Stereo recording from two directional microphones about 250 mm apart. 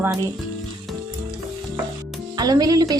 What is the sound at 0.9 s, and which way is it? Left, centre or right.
Frying, centre.